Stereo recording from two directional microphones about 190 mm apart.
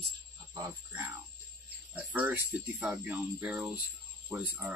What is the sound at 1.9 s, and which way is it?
Speech, 10° right (ahead or behind).